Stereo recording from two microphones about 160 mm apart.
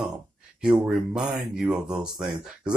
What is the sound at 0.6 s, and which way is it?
Speech, 5° right (ahead or behind).